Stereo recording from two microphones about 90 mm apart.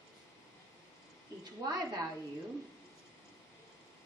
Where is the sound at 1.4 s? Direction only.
50° right (ahead or behind).